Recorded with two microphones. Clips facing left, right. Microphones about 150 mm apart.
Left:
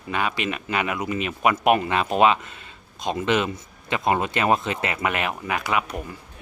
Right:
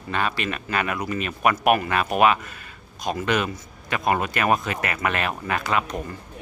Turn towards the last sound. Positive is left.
turn(degrees=15)  # may be behind; listen again after turning